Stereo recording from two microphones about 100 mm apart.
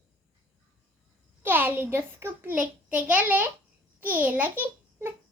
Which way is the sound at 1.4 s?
20° right (ahead or behind).